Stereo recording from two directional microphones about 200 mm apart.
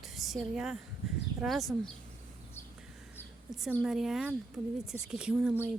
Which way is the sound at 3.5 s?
Centre (ahead or behind).